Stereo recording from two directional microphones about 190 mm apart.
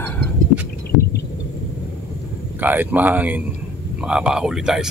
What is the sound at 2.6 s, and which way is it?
A man's voice, 10° right (ahead or behind).